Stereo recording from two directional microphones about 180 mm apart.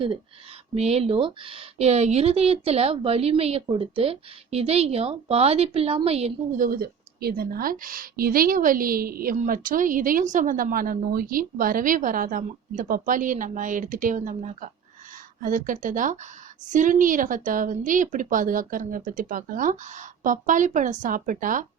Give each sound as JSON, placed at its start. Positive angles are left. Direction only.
{"t": 0.7, "sound": "speech", "side_deg": -35}
{"t": 6.6, "sound": "a woman's voice", "side_deg": -55}